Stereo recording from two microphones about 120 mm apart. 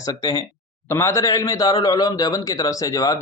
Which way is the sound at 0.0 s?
30° left (ahead or behind).